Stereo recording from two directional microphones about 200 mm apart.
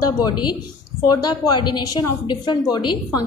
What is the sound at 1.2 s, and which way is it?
A woman's voice, 20° left (ahead or behind).